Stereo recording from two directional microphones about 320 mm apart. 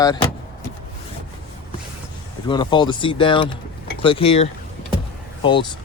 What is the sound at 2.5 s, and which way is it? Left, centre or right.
Speech, centre.